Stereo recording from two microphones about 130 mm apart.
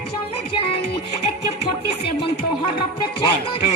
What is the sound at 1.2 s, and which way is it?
Music, 50° left (ahead or behind).